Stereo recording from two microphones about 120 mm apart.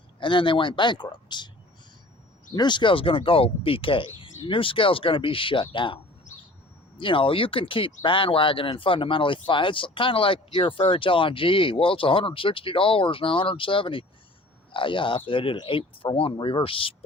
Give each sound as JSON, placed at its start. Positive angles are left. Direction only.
{"t": 0.2, "sound": "speech", "side_deg": 45}
{"t": 2.6, "sound": "speech", "side_deg": 40}
{"t": 7.0, "sound": "speech", "side_deg": 45}